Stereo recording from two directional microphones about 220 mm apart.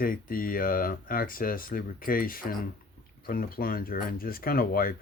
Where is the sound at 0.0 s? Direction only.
40° left (ahead or behind).